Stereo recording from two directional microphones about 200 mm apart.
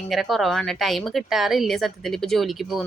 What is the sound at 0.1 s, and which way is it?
Speech, centre (ahead or behind).